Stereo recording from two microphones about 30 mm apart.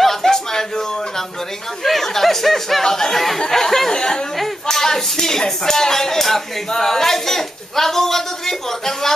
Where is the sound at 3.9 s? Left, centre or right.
Left.